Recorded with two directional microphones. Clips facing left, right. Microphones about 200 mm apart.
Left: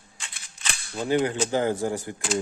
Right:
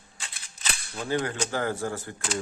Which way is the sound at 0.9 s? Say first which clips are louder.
Left 5 dB; 20° left (ahead or behind).